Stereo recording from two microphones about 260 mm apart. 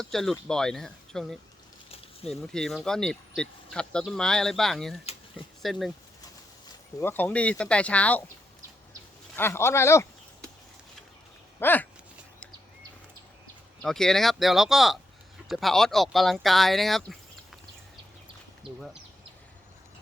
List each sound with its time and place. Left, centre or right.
0.0 s speech: centre
9.3 s speech: centre
11.6 s speech: centre
13.8 s speech: centre
18.6 s speech: centre